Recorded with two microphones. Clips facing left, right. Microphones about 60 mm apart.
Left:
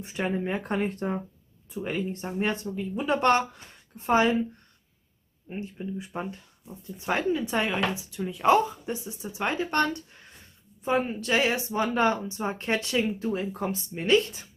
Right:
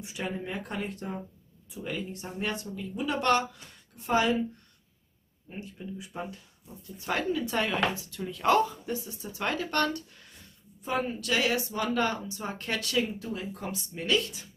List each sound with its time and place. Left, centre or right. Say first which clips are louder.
0.0 s a woman's voice: left 6 dB; left
5.5 s speech: left 5 dB; left